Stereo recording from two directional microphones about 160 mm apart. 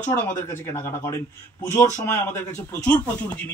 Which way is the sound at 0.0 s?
10° left (ahead or behind).